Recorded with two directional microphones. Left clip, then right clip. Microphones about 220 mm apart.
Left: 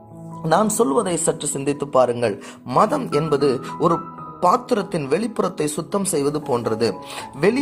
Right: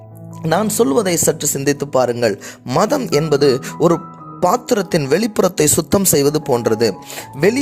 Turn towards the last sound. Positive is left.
turn(degrees=-40)  # may be behind; listen again after turning